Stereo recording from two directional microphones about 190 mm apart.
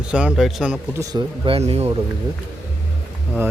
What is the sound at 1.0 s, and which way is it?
Speech, 20° right (ahead or behind).